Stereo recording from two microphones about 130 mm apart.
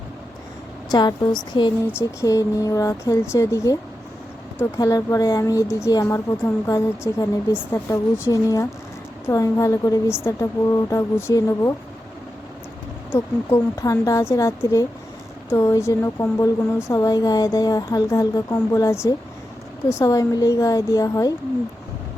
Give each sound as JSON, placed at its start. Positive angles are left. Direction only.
{"t": 0.9, "sound": "speech", "side_deg": 35}
{"t": 1.9, "sound": "speech", "side_deg": 25}
{"t": 13.1, "sound": "speech", "side_deg": 25}